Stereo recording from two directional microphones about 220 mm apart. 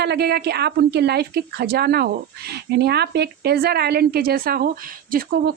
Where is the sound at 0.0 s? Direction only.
50° right (ahead or behind).